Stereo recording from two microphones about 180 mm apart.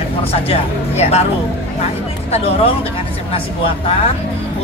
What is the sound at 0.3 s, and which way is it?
Speech, 35° left (ahead or behind).